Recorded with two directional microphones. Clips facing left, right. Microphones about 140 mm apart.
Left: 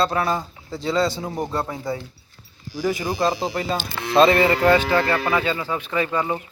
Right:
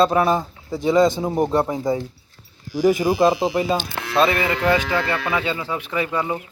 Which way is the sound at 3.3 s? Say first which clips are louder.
Right 4 dB; centre (ahead or behind).